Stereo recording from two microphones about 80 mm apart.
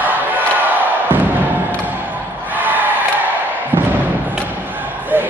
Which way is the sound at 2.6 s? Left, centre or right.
Right.